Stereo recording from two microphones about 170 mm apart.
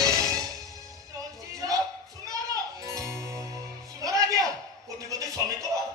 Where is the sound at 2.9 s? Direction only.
15° right (ahead or behind).